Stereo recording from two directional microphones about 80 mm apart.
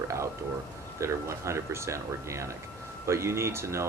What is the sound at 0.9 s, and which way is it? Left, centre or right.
Speech, right.